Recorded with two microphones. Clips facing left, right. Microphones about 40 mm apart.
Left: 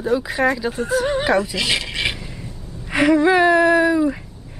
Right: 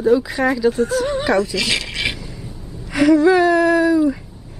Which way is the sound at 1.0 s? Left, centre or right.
Left.